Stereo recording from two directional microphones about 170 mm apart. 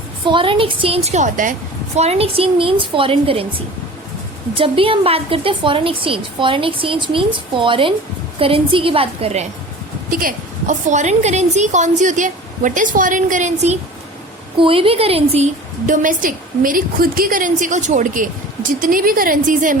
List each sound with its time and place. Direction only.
0.3 s a woman's voice: 30° right (ahead or behind); by 1.5 s 50° right (ahead or behind)
2.0 s a woman's voice: 35° right (ahead or behind)
4.5 s a woman's voice: 30° right (ahead or behind)
10.1 s a woman's voice: 55° right (ahead or behind)
14.6 s a woman's voice: 30° right (ahead or behind)
15.9 s a woman's voice: 50° right (ahead or behind)